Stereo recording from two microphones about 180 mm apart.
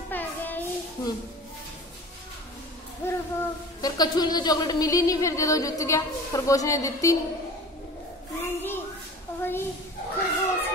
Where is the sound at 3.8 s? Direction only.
20° left (ahead or behind).